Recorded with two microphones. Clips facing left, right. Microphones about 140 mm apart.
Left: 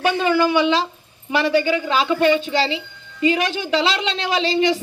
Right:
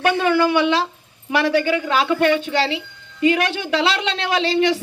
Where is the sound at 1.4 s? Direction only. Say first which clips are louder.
Even; centre (ahead or behind).